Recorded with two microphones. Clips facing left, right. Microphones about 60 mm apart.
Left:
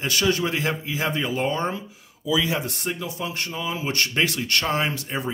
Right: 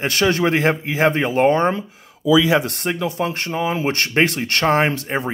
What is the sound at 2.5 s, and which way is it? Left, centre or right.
Speech, right.